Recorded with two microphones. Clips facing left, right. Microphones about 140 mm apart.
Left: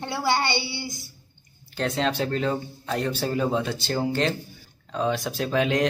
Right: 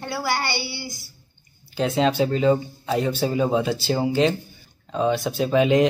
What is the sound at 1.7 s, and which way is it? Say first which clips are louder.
Speech: right 5 dB; 5° right (ahead or behind).